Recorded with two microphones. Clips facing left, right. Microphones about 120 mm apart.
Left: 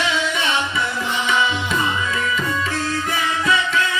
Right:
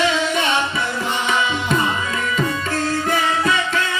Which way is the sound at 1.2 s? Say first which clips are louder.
Left 1 dB; 45° right (ahead or behind).